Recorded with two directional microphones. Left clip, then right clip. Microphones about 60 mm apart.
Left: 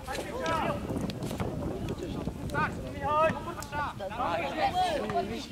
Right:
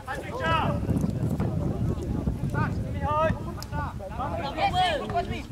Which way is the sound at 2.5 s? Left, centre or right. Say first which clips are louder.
Left 2 dB; centre.